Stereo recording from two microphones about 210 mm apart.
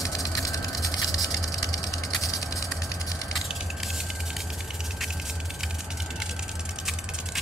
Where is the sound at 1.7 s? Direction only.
15° left (ahead or behind).